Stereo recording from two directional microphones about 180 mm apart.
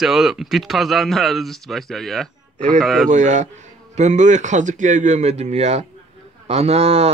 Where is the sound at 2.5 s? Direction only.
40° right (ahead or behind).